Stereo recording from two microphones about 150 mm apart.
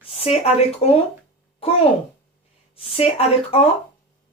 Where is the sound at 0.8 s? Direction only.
45° left (ahead or behind).